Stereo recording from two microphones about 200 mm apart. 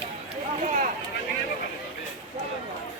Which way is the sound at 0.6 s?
40° right (ahead or behind).